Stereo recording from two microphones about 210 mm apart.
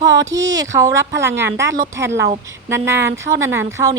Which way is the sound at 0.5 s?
15° right (ahead or behind).